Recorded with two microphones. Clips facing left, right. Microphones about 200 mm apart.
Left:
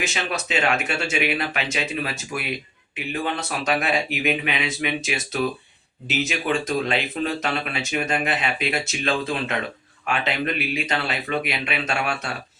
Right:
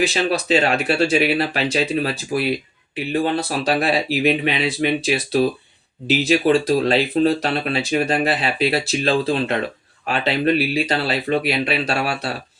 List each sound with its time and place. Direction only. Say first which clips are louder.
0.0 s speech: right 8 dB; 35° right (ahead or behind)